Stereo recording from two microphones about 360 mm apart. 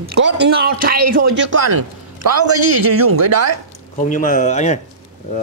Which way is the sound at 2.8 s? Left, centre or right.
Right.